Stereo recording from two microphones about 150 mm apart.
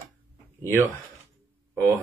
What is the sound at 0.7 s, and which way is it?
Speech, 15° right (ahead or behind).